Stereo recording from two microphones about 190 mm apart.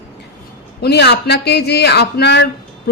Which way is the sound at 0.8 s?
60° left (ahead or behind).